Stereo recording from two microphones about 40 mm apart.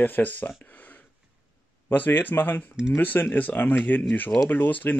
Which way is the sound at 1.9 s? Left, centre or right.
Left.